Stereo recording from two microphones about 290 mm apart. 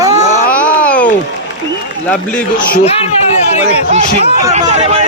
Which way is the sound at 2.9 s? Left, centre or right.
Left.